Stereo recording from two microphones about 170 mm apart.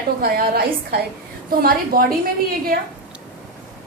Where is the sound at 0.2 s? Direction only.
65° right (ahead or behind).